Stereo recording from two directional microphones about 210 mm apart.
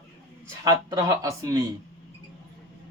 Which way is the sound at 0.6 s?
15° right (ahead or behind).